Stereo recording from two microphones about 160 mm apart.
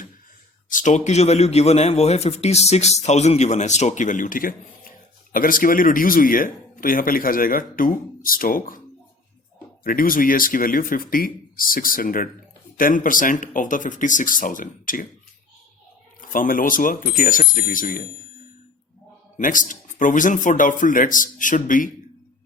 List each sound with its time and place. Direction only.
0.7 s a man's voice: 50° left (ahead or behind)
9.8 s speech: 60° left (ahead or behind)
16.3 s speech: 60° left (ahead or behind)